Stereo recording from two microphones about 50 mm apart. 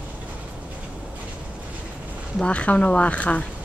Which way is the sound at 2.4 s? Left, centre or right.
Left.